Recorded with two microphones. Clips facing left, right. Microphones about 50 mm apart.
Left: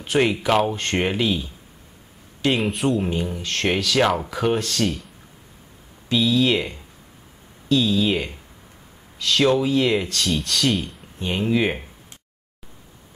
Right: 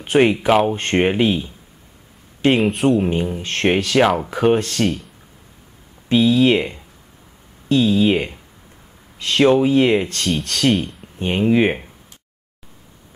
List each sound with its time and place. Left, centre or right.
0.0 s speech: right
2.5 s speech: centre
3.3 s speech: right
4.0 s speech: centre
4.3 s speech: right
6.2 s speech: right
10.2 s speech: centre
11.1 s speech: right